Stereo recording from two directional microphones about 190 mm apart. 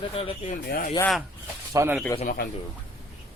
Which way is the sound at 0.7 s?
50° left (ahead or behind).